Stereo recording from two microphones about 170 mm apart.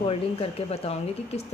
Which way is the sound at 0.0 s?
35° left (ahead or behind).